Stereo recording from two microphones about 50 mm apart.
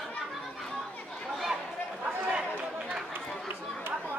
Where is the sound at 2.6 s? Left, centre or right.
Centre.